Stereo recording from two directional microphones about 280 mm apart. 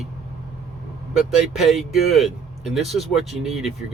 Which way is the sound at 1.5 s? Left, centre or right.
Centre.